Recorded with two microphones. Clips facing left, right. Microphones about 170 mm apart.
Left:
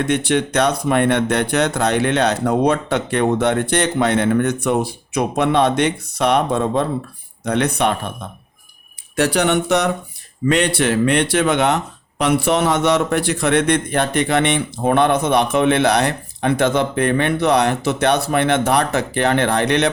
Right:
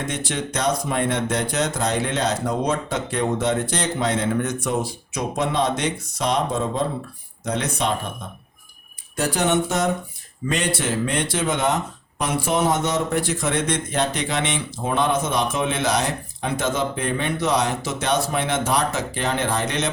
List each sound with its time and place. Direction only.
0.0 s speech: 65° left (ahead or behind)
9.1 s speech: 75° left (ahead or behind)